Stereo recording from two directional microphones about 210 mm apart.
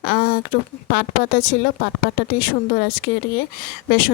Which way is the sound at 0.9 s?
45° left (ahead or behind).